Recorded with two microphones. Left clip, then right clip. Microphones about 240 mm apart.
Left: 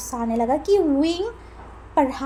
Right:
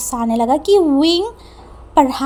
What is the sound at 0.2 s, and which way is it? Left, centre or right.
A woman's voice, right.